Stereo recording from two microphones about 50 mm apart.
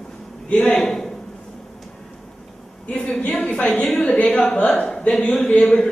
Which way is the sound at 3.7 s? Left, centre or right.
Centre.